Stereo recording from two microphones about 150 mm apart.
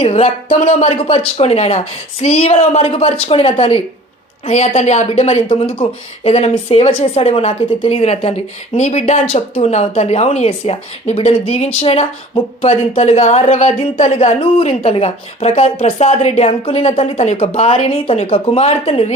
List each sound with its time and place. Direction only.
0.0 s a woman's voice: 45° left (ahead or behind)